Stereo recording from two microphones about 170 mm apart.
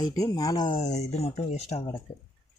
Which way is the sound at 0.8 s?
40° left (ahead or behind).